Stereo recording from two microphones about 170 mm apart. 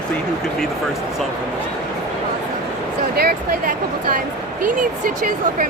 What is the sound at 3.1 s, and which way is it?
Speech, 60° right (ahead or behind).